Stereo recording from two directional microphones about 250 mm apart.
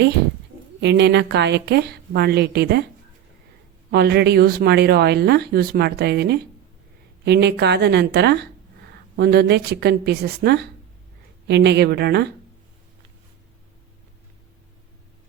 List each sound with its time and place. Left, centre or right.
0.8 s speech: right
3.9 s speech: right